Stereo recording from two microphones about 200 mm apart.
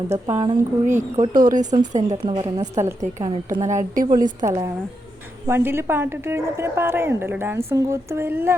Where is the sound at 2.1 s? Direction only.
20° right (ahead or behind).